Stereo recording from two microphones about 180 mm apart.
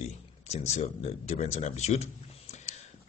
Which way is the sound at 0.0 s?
35° left (ahead or behind).